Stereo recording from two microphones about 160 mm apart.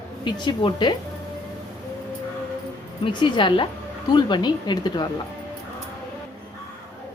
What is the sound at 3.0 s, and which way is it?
A woman's voice, 30° left (ahead or behind).